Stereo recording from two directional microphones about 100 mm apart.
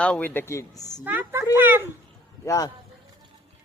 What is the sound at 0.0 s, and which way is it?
Speech, 15° left (ahead or behind).